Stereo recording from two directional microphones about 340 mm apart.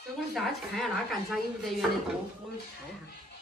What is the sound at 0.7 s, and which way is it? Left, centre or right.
A woman's voice, centre.